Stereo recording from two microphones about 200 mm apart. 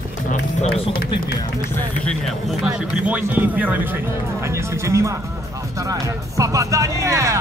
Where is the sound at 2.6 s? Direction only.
5° right (ahead or behind).